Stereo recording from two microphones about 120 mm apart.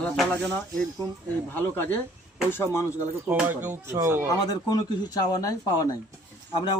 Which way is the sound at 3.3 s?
15° right (ahead or behind).